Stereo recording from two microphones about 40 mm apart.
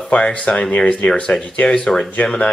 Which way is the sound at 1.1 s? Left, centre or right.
Left.